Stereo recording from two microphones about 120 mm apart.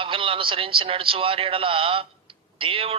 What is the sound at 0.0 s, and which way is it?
A man's voice, 50° right (ahead or behind).